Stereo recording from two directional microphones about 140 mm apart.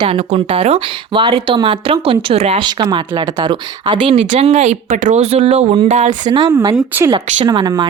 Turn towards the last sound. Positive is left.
turn(degrees=-30)  # may be behind; listen again after turning